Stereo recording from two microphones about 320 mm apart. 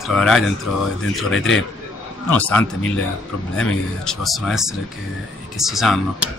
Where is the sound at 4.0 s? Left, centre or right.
Centre.